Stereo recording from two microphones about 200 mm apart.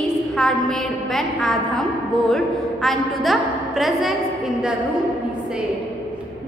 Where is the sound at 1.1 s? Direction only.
Centre (ahead or behind).